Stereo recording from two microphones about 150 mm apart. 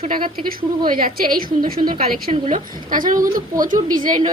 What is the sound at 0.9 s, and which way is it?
A woman's voice, 70° right (ahead or behind).